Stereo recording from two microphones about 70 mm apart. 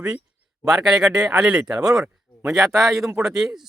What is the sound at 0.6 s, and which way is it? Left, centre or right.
Speech, centre.